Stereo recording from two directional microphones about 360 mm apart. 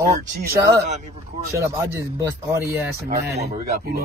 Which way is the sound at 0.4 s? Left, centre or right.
Centre.